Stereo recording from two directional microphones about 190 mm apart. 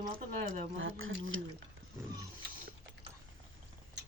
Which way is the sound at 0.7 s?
90° right.